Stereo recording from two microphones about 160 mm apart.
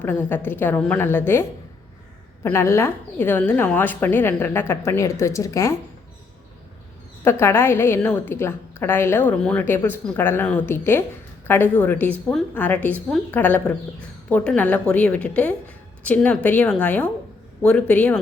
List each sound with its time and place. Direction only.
0.0 s a woman's voice: 10° left (ahead or behind)
7.3 s a woman's voice: 15° left (ahead or behind)